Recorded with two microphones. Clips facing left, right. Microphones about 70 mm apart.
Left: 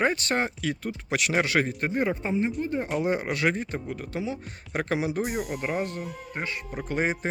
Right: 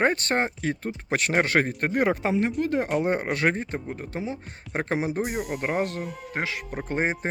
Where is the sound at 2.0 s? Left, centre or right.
Right.